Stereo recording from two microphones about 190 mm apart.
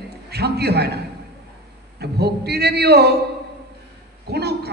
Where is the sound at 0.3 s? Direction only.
60° right (ahead or behind).